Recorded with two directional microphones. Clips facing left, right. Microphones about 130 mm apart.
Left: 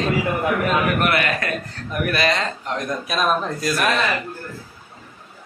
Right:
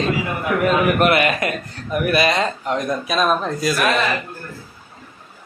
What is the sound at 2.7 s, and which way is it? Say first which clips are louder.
A man's voice: right 3 dB; centre (ahead or behind).